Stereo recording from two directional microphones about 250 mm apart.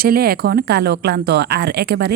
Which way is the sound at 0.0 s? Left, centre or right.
Right.